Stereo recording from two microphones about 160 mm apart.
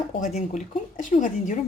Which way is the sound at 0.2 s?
45° left (ahead or behind).